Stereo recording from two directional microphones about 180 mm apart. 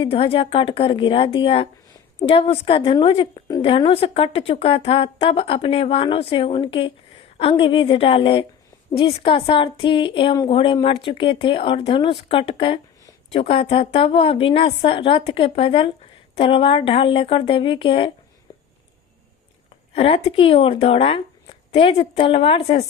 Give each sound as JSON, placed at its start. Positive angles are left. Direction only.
{"t": 0.0, "sound": "a woman's voice", "side_deg": 30}
{"t": 19.9, "sound": "a woman's voice", "side_deg": 35}